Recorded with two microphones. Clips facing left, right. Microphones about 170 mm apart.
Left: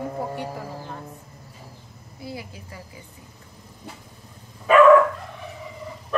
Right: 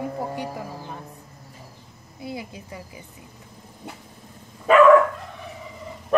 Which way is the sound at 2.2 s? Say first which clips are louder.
Right 2 dB; 20° right (ahead or behind).